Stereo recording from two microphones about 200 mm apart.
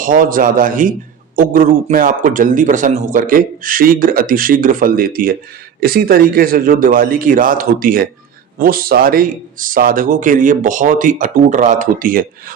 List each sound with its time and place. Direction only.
0.0 s a man's voice: 45° right (ahead or behind)